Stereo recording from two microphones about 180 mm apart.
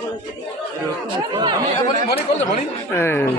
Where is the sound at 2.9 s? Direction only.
15° left (ahead or behind).